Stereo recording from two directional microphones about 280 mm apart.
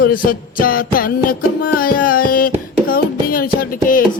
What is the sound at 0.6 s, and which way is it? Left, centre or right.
Music, left.